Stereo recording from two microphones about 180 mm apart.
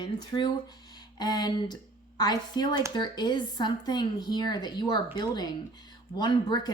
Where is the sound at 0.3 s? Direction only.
20° left (ahead or behind).